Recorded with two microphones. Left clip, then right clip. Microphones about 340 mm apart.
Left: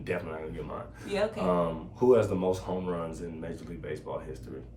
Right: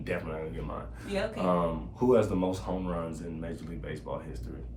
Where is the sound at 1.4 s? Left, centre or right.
Centre.